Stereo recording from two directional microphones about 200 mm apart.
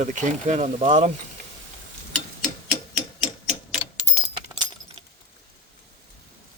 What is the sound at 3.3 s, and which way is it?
Clock, 25° left (ahead or behind).